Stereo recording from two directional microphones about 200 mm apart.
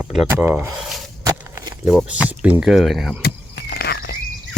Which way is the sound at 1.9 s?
5° right (ahead or behind).